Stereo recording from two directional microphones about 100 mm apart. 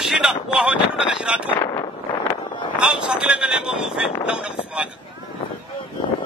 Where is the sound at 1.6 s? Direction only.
35° left (ahead or behind).